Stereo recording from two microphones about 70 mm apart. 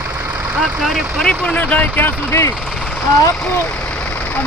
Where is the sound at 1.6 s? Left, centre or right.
Left.